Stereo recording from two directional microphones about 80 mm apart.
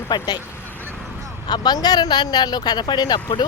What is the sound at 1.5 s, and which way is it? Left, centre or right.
Speech, left.